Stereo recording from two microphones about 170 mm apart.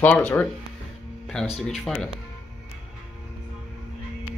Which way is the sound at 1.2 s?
Centre (ahead or behind).